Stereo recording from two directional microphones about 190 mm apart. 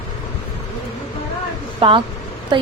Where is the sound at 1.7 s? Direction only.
25° right (ahead or behind).